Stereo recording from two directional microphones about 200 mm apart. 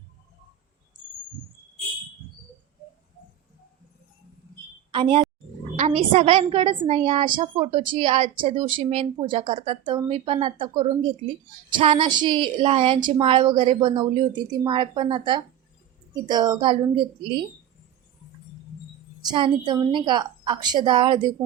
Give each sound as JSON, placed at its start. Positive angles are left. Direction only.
{"t": 4.9, "sound": "a woman's voice", "side_deg": -25}
{"t": 19.3, "sound": "a woman's voice", "side_deg": -20}